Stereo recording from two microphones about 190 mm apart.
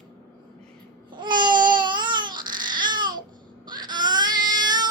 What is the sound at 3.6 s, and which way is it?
Baby cry, 20° right (ahead or behind).